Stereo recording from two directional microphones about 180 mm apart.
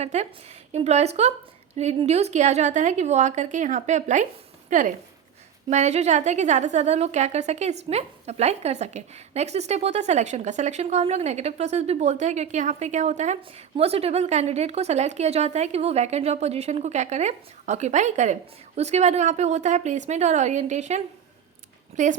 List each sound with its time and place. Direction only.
0.0 s a woman's voice: 40° right (ahead or behind)